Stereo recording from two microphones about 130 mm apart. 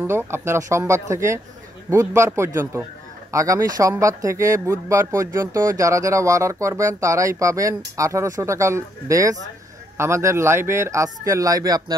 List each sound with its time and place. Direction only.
0.0 s speech: 20° right (ahead or behind)